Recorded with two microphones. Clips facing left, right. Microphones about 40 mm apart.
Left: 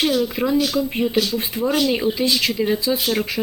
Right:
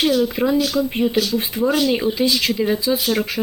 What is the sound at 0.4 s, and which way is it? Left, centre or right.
Speech, centre.